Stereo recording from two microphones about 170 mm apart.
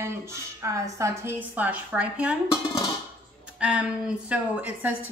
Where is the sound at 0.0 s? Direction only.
15° right (ahead or behind).